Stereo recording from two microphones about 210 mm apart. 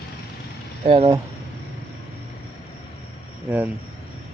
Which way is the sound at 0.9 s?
25° right (ahead or behind).